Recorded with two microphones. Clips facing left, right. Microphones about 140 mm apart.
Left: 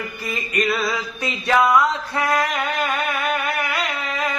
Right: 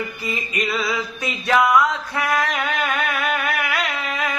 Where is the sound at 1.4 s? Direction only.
20° left (ahead or behind).